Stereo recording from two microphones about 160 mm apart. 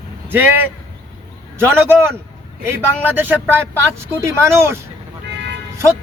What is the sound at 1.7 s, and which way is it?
A man's voice, 15° right (ahead or behind).